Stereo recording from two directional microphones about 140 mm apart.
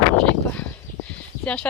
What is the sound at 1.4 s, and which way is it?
Speech, 10° left (ahead or behind).